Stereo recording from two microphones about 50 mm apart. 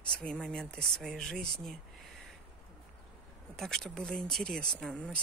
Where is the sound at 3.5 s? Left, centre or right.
Centre.